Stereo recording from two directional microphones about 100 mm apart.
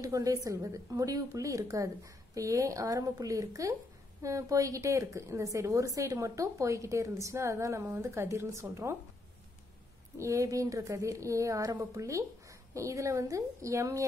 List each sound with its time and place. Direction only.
0.0 s a woman's voice: 35° right (ahead or behind)
10.1 s a woman's voice: 30° right (ahead or behind)